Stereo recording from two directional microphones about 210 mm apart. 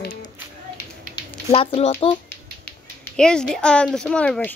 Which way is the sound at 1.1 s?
25° left (ahead or behind).